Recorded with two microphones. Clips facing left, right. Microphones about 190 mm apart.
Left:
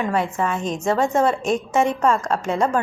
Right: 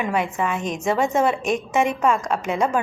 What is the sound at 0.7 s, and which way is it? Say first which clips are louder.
Speech: left 1 dB; 20° right (ahead or behind).